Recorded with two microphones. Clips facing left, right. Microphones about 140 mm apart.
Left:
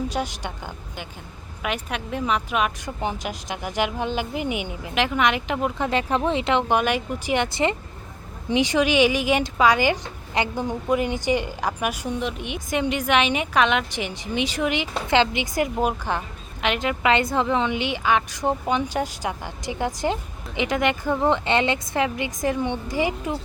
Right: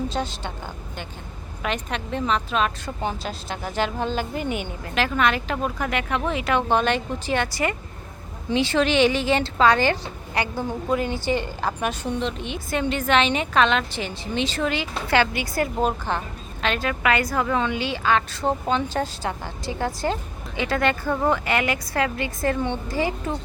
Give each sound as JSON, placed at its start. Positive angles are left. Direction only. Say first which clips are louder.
{"t": 0.1, "sound": "speech", "louder": "even", "side_deg": 15}
{"t": 1.6, "sound": "speech", "louder": "even", "side_deg": 10}